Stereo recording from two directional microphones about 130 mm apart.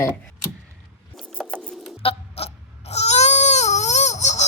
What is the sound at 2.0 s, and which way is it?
Crying, 50° left (ahead or behind).